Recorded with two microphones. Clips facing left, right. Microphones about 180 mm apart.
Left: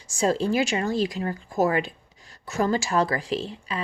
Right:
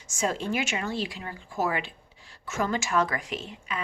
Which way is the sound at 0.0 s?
35° left (ahead or behind).